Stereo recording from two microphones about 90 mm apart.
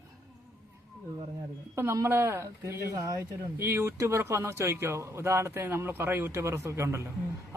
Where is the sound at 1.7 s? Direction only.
30° right (ahead or behind).